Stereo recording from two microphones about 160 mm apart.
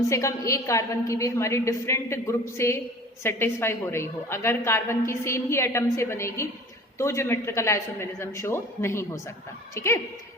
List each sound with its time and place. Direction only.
0.1 s a woman's voice: 20° left (ahead or behind)